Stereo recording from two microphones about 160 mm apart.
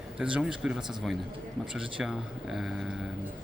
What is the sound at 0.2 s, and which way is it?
Speech, 5° right (ahead or behind).